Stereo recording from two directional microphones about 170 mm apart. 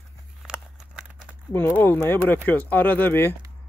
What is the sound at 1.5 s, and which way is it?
Speech, 10° left (ahead or behind).